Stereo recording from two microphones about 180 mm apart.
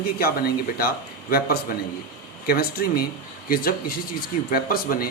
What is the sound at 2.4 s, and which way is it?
Speech, 55° left (ahead or behind).